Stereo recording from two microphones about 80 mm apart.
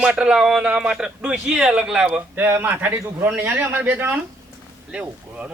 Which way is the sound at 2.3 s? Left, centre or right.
Right.